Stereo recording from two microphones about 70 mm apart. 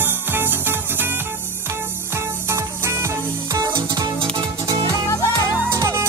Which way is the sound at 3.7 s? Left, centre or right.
Right.